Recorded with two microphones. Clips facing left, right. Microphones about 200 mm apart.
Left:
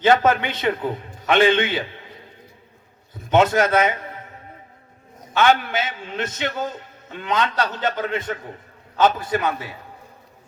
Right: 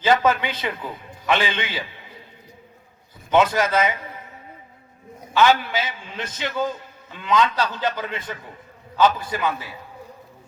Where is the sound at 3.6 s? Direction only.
55° left (ahead or behind).